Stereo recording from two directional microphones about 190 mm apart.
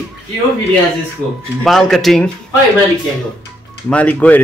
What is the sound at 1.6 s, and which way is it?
Speech, centre (ahead or behind).